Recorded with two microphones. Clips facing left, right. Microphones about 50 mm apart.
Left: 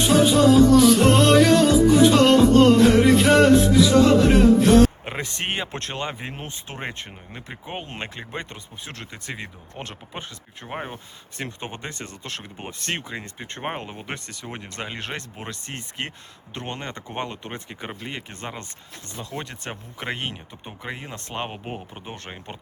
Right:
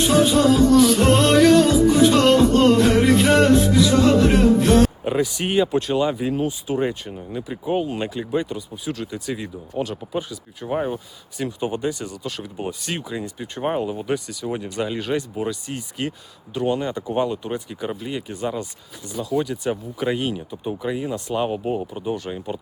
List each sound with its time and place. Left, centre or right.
0.0 s music: centre
5.2 s speech: left
7.9 s speech: left
10.9 s speech: left
13.4 s speech: left
15.0 s speech: left
18.0 s speech: left
22.0 s speech: left